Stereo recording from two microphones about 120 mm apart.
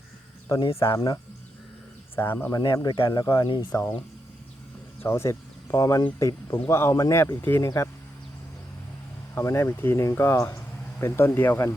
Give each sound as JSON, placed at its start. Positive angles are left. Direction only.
{"t": 0.8, "sound": "speech", "side_deg": 25}
{"t": 2.5, "sound": "speech", "side_deg": 35}
{"t": 3.4, "sound": "speech", "side_deg": 40}
{"t": 5.0, "sound": "speech", "side_deg": 20}
{"t": 9.3, "sound": "speech", "side_deg": 25}